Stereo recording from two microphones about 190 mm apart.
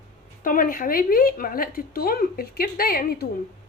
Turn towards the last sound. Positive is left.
turn(degrees=50)  # may be behind; listen again after turning